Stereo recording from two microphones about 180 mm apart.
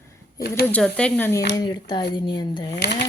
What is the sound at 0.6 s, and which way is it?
Speech, 5° left (ahead or behind).